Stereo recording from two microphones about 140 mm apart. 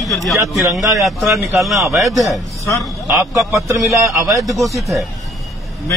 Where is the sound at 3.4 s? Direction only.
Centre (ahead or behind).